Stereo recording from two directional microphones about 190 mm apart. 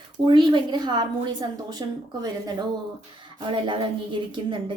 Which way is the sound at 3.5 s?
25° right (ahead or behind).